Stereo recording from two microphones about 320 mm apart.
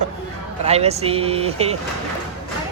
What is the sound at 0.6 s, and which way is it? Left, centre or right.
Speech, centre.